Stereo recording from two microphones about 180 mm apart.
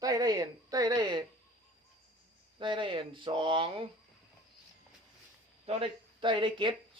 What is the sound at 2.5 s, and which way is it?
A woman's voice, 25° right (ahead or behind).